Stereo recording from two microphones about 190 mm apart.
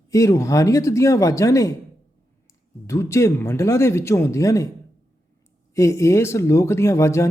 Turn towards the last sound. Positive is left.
turn(degrees=15)  # may be behind; listen again after turning